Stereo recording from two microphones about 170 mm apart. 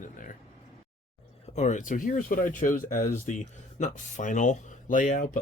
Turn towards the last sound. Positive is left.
turn(degrees=50)  # may be behind; listen again after turning